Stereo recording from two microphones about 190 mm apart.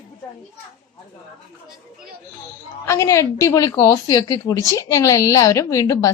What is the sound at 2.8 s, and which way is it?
A woman's voice, 15° left (ahead or behind).